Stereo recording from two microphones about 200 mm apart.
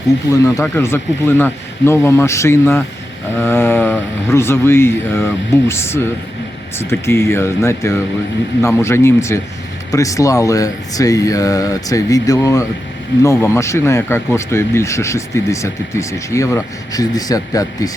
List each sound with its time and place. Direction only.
0.5 s speech: 15° left (ahead or behind)